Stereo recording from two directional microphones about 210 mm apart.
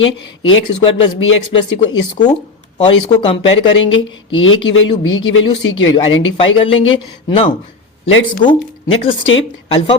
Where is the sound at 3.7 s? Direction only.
65° left (ahead or behind).